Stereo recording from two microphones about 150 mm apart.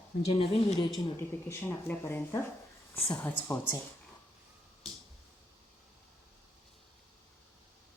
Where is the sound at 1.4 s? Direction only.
15° left (ahead or behind).